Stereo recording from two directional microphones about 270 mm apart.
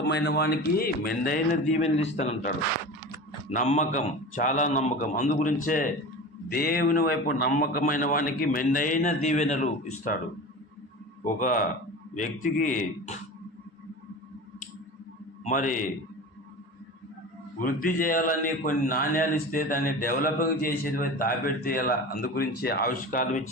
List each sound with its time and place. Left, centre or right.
0.0 s a man's voice: left
3.5 s a man's voice: left
11.2 s a man's voice: left
15.4 s a man's voice: left
17.6 s a man's voice: left